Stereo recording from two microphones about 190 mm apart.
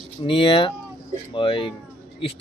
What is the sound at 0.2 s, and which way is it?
Speech, 25° left (ahead or behind).